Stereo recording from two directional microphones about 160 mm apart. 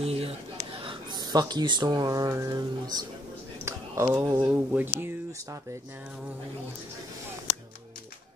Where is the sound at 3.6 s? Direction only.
15° right (ahead or behind).